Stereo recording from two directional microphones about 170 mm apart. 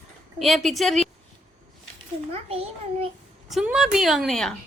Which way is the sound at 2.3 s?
35° right (ahead or behind).